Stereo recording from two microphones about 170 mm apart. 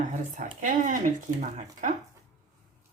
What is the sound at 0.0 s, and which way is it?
Speech, 50° right (ahead or behind).